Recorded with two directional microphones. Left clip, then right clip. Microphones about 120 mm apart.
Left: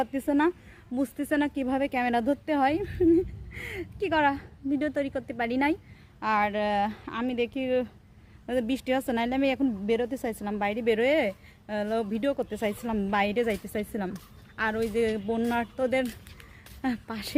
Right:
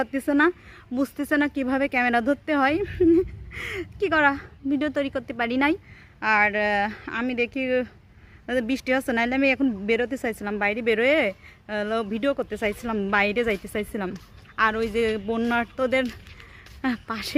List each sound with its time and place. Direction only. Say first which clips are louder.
0.0 s speech: right 4 dB; 20° right (ahead or behind)